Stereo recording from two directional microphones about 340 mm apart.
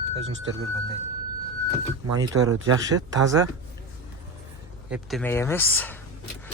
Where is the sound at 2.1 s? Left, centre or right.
Centre.